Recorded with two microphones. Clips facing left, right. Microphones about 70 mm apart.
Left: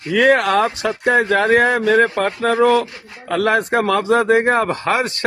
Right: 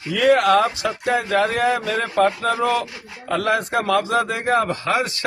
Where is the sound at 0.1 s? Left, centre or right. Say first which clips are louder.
Left 1 dB; left.